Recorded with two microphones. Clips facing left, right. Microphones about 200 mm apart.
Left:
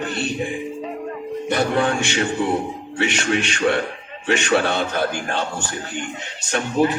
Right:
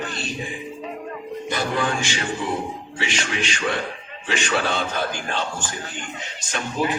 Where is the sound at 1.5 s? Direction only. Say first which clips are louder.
Left 5 dB; 65° left (ahead or behind).